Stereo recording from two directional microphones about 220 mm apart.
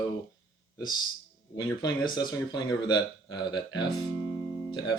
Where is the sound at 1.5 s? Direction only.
20° left (ahead or behind).